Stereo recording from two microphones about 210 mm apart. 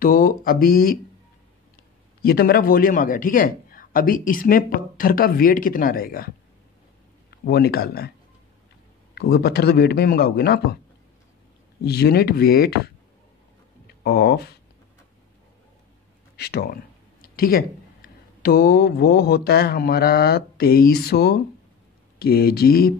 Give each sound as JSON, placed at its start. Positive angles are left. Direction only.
{"t": 0.0, "sound": "a man's voice", "side_deg": 45}
{"t": 2.2, "sound": "a man's voice", "side_deg": 45}
{"t": 7.4, "sound": "a man's voice", "side_deg": 50}
{"t": 9.1, "sound": "a man's voice", "side_deg": 50}
{"t": 11.8, "sound": "a man's voice", "side_deg": 50}
{"t": 14.0, "sound": "a man's voice", "side_deg": 50}
{"t": 16.3, "sound": "a man's voice", "side_deg": 50}